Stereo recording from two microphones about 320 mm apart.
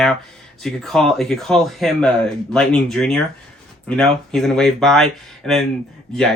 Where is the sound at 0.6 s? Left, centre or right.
Centre.